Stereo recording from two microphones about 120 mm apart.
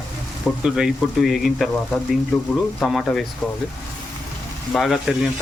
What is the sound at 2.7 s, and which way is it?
Speech, 5° left (ahead or behind).